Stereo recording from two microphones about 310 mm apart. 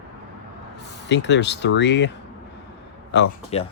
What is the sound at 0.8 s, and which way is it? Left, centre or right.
Speech, left.